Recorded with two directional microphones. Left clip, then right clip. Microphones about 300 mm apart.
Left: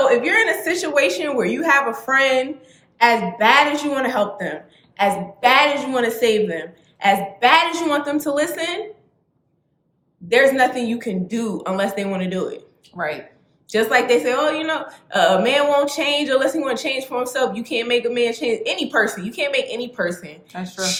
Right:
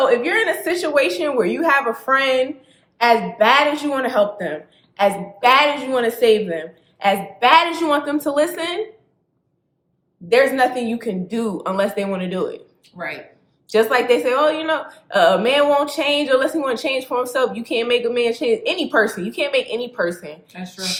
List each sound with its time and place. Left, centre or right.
0.0 s a woman's voice: centre
10.2 s a woman's voice: centre
13.7 s a woman's voice: centre
20.5 s speech: centre